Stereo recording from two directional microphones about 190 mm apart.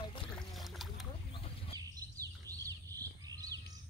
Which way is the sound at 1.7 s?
20° right (ahead or behind).